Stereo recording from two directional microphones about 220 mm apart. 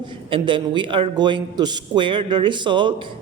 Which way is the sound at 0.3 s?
20° right (ahead or behind).